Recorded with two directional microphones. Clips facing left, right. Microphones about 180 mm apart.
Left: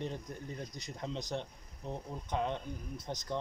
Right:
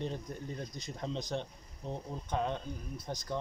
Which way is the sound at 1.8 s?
15° left (ahead or behind).